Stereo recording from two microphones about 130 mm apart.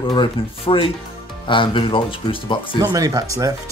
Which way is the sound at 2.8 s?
30° right (ahead or behind).